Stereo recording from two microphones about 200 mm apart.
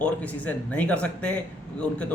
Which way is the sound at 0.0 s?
5° left (ahead or behind).